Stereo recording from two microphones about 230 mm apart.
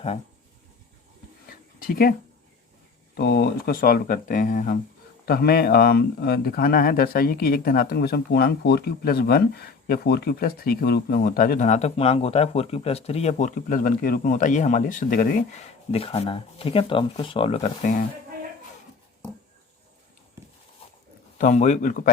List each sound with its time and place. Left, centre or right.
1.5 s a sound: left
3.2 s speech: left
21.3 s speech: left